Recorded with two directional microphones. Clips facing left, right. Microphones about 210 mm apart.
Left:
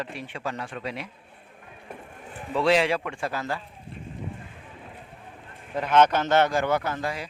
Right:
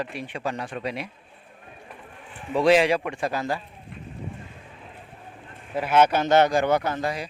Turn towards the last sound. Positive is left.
turn(degrees=-20)  # may be behind; listen again after turning